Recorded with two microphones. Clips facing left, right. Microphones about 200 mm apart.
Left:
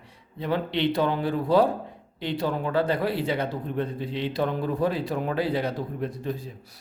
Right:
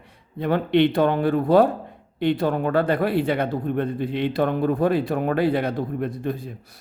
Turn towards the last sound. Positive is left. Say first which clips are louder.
# right 4 dB
turn(degrees=-60)  # may be behind; listen again after turning